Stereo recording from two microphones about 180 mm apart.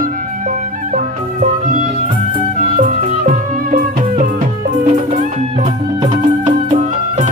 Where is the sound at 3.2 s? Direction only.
50° right (ahead or behind).